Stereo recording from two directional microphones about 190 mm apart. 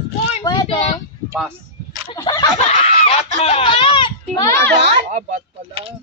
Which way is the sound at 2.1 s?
20° left (ahead or behind).